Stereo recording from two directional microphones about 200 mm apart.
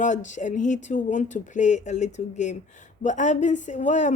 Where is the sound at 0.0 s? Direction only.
40° left (ahead or behind).